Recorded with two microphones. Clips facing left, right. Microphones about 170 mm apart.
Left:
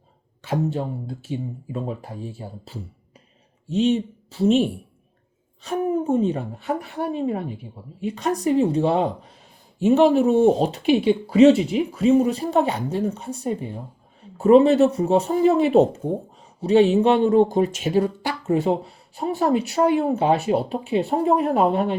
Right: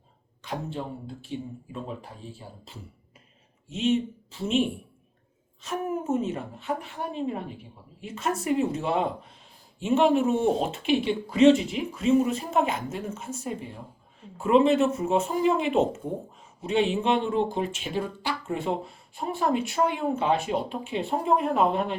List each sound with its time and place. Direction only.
0.5 s speech: 40° left (ahead or behind)
8.4 s speech: 35° left (ahead or behind)